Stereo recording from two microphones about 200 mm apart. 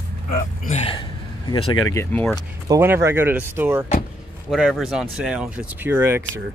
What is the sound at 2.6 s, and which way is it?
Speech, 10° right (ahead or behind).